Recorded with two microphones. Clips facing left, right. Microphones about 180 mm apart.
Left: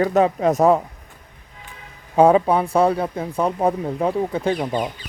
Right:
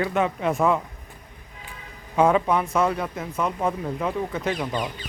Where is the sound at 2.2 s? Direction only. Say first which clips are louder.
Left 5 dB; 35° left (ahead or behind).